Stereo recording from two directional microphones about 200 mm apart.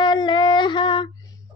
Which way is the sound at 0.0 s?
25° left (ahead or behind).